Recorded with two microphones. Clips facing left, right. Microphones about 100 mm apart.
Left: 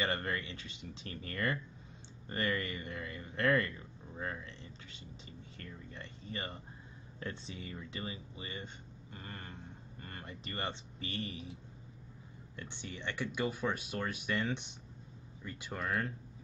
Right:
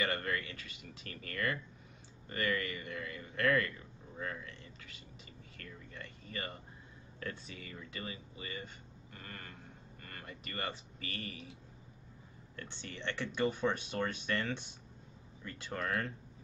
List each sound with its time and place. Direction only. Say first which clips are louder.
0.0 s speech: even; 30° left (ahead or behind)
5.6 s speech: even; 25° left (ahead or behind)
12.5 s speech: left 1 dB; 15° left (ahead or behind)